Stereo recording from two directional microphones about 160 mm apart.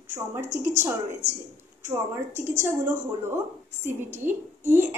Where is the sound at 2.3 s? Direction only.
15° right (ahead or behind).